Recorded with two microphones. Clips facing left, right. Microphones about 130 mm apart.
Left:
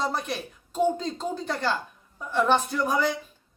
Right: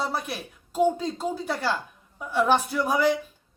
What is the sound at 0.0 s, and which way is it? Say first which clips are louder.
Speech: left 1 dB; 5° right (ahead or behind).